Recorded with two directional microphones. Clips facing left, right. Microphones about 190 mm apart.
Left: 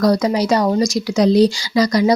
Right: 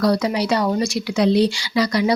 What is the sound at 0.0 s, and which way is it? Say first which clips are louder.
Speech: left 3 dB; 40° left (ahead or behind).